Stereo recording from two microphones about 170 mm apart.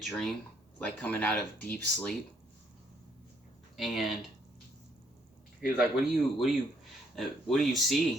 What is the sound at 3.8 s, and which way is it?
Speech, centre (ahead or behind).